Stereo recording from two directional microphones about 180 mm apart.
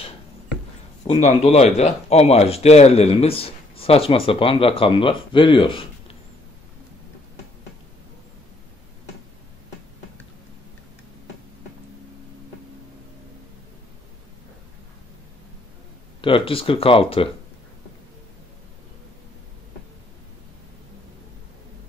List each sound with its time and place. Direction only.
1.0 s speech: 35° left (ahead or behind)
16.2 s speech: 30° left (ahead or behind)